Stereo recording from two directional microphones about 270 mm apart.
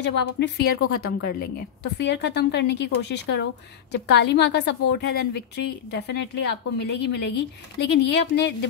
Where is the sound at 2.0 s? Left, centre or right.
Left.